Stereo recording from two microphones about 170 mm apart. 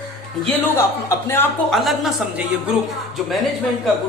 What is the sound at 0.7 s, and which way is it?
Speech, 15° left (ahead or behind).